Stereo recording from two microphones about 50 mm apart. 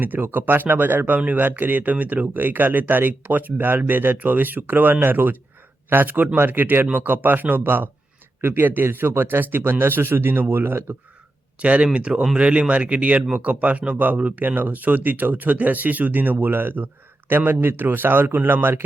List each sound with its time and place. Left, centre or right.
0.0 s speech: right
11.6 s a man's voice: right